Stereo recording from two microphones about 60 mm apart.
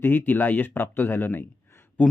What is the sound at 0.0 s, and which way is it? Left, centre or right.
Speech, left.